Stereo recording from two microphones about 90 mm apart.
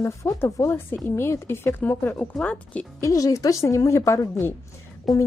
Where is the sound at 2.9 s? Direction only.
40° left (ahead or behind).